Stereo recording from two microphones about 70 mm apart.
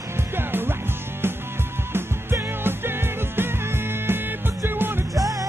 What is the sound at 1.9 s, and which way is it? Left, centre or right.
Music, right.